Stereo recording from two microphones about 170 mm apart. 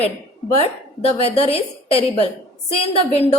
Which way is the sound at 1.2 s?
35° left (ahead or behind).